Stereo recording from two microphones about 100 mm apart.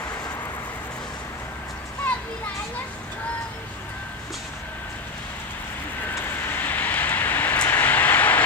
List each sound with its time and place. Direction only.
6.1 s vehicle: 20° left (ahead or behind)